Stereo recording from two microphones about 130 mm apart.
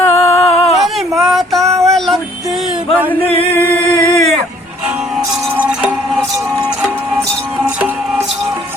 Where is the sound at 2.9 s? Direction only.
15° right (ahead or behind).